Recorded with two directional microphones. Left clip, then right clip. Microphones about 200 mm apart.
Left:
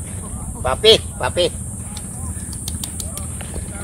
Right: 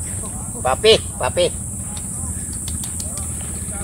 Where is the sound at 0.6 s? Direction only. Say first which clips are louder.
Left 1 dB; 50° left (ahead or behind).